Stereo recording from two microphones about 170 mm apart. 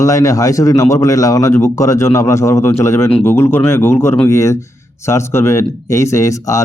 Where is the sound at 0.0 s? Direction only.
20° left (ahead or behind).